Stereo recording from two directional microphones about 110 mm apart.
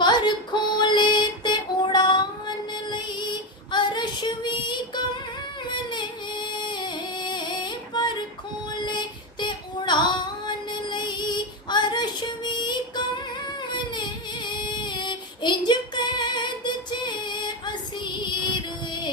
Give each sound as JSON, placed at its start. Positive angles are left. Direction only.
{"t": 0.0, "sound": "female singing", "side_deg": 40}
{"t": 3.7, "sound": "female singing", "side_deg": 45}
{"t": 5.6, "sound": "music", "side_deg": 45}
{"t": 8.8, "sound": "female singing", "side_deg": 45}
{"t": 13.9, "sound": "female singing", "side_deg": 45}